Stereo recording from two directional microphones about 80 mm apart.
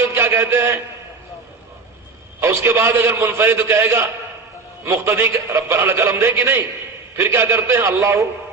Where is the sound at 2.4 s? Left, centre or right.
Right.